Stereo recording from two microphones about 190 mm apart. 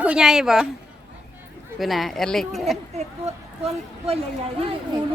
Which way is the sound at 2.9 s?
35° right (ahead or behind).